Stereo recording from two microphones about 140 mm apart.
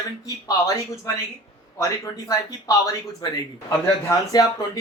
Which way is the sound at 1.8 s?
25° left (ahead or behind).